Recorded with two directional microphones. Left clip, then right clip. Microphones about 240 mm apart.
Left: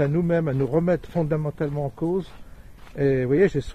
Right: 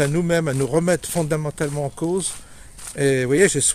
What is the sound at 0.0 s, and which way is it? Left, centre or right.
Speech, centre.